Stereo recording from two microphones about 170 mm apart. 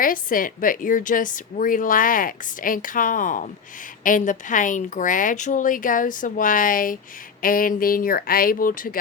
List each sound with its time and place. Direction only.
0.0 s a woman's voice: 55° left (ahead or behind)